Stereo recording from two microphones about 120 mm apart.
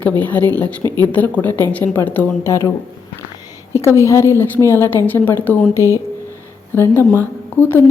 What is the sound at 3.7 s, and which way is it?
A woman's voice, 25° left (ahead or behind).